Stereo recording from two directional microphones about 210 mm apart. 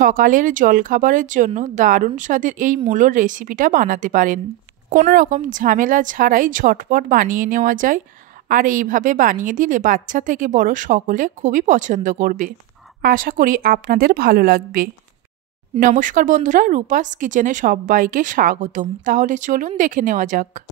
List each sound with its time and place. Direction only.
0.0 s a woman's voice: 40° right (ahead or behind)